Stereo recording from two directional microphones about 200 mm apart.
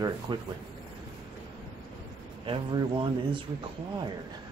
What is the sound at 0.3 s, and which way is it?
Speech, 25° right (ahead or behind).